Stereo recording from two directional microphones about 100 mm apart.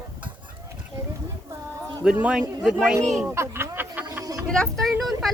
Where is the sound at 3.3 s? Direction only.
25° right (ahead or behind).